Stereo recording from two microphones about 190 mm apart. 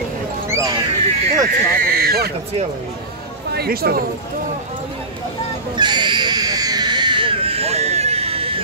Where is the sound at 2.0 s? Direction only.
55° right (ahead or behind).